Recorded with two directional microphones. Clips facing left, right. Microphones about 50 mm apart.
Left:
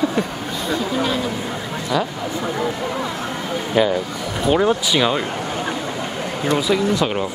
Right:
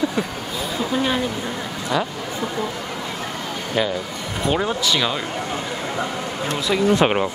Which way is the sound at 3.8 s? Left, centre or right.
Centre.